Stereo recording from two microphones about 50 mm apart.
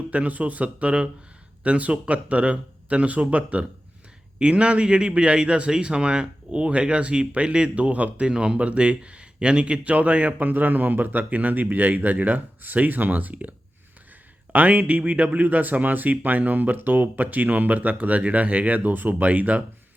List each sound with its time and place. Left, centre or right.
0.1 s a man's voice: right
14.5 s speech: right